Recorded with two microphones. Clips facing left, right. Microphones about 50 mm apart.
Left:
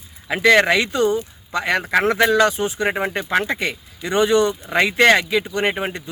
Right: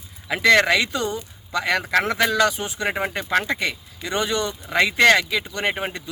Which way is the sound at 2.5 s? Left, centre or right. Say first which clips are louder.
Left 6 dB; left.